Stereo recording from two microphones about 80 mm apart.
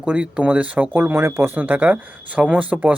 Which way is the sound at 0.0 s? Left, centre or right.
Centre.